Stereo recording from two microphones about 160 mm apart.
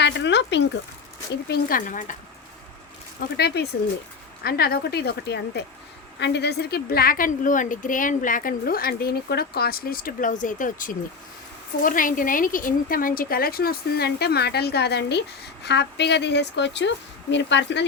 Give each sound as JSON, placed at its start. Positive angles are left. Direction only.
{"t": 0.0, "sound": "speech", "side_deg": 90}
{"t": 1.5, "sound": "a woman's voice", "side_deg": 65}
{"t": 3.2, "sound": "a woman's voice", "side_deg": 90}
{"t": 4.4, "sound": "a woman's voice", "side_deg": 75}